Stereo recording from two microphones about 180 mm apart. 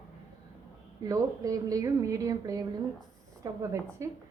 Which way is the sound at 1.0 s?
20° right (ahead or behind).